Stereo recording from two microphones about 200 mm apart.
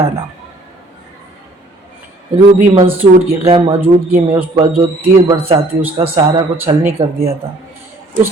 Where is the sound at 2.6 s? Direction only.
35° right (ahead or behind).